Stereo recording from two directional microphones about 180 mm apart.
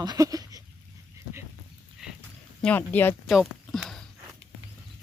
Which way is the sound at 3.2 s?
Centre (ahead or behind).